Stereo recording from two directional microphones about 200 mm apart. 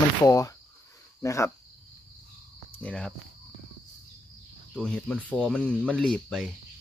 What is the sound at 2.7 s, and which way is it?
Speech, 5° left (ahead or behind).